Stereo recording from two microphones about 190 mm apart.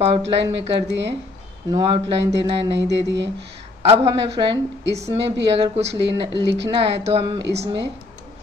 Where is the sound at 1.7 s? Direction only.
25° right (ahead or behind).